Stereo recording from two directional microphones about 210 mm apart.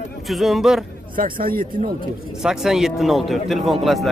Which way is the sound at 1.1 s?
40° right (ahead or behind).